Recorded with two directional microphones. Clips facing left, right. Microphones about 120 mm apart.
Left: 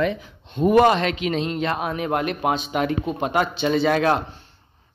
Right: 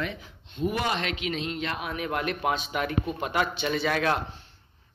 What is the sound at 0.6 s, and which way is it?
A man's voice, 50° left (ahead or behind).